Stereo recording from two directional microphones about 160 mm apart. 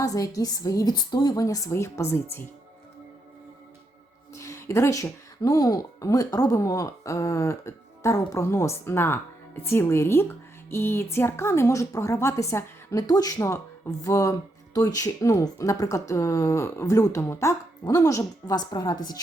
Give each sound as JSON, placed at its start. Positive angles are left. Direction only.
{"t": 0.0, "sound": "a woman's voice", "side_deg": 20}
{"t": 4.4, "sound": "a woman's voice", "side_deg": 20}